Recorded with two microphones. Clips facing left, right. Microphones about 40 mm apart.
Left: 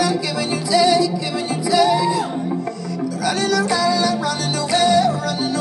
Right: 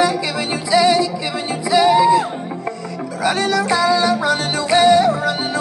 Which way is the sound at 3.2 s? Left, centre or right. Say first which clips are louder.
Right 2 dB; right.